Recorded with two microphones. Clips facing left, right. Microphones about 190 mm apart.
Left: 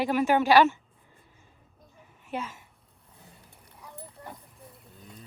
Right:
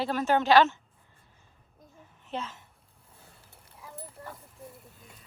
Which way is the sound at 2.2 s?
10° left (ahead or behind).